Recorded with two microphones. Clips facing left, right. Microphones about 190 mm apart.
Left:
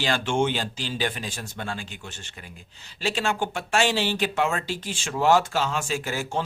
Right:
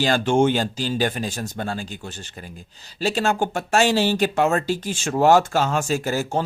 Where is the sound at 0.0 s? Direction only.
40° right (ahead or behind).